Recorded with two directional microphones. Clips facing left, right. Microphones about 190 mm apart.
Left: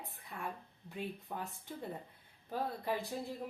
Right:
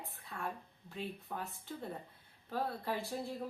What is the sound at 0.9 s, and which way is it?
Speech, 15° left (ahead or behind).